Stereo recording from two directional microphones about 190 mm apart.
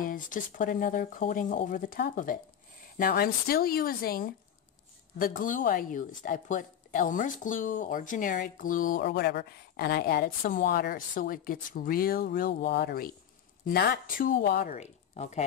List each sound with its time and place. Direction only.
0.0 s a woman's voice: 45° left (ahead or behind)
14.7 s a woman's voice: 35° left (ahead or behind)